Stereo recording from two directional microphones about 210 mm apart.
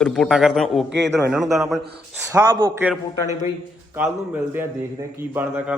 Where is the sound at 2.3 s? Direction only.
15° right (ahead or behind).